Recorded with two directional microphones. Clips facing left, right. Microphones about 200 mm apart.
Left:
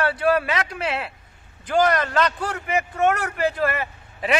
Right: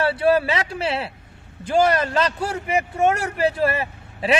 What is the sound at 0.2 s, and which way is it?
Speech, 25° right (ahead or behind).